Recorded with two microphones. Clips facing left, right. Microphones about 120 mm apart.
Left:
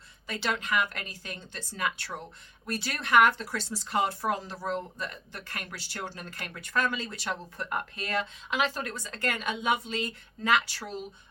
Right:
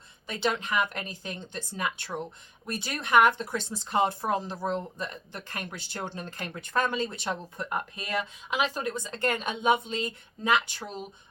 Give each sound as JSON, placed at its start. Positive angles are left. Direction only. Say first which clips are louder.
{"t": 0.3, "sound": "speech", "louder": "right 2 dB", "side_deg": -20}